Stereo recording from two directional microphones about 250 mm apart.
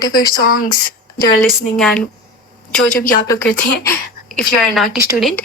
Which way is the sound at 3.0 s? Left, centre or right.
Left.